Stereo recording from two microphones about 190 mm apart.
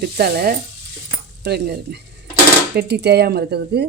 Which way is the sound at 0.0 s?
55° right (ahead or behind).